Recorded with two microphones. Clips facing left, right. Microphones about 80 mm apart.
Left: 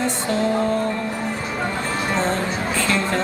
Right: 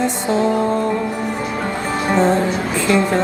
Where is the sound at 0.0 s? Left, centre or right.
Right.